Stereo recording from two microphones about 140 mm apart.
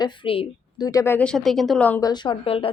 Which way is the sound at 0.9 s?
20° left (ahead or behind).